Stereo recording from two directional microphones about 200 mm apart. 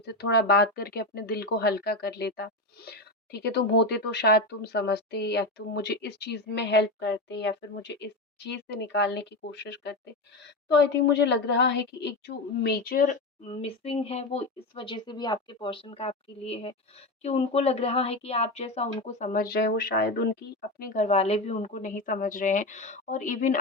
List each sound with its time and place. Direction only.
0.0 s speech: 55° left (ahead or behind)
13.4 s speech: 30° left (ahead or behind)